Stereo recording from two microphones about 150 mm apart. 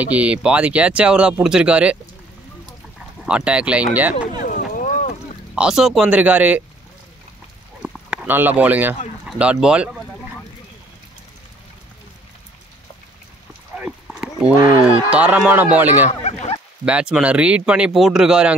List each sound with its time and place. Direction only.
0.0 s speech: 10° right (ahead or behind)
3.3 s speech: 5° right (ahead or behind)
4.4 s a sound: 70° left (ahead or behind)
5.5 s speech: 5° right (ahead or behind)
7.8 s a sound: 5° right (ahead or behind)
9.4 s speech: 5° right (ahead or behind)
13.7 s clip-clop: 5° right (ahead or behind)
15.0 s speech: 10° right (ahead or behind)
16.1 s a sound: 50° left (ahead or behind)
16.8 s speech: 5° right (ahead or behind)